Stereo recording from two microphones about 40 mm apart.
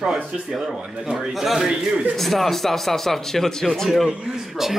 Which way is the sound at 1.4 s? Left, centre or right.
Centre.